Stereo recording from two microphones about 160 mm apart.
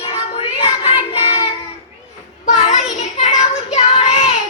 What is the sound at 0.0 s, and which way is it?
Child singing, 40° left (ahead or behind).